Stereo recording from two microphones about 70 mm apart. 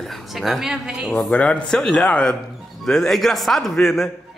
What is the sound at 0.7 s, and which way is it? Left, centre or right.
Speech, centre.